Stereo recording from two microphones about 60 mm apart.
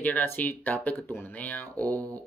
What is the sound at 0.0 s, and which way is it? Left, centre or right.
Speech, left.